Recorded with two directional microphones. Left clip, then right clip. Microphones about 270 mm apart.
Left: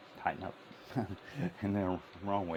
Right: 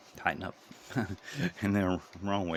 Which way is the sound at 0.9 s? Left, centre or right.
Centre.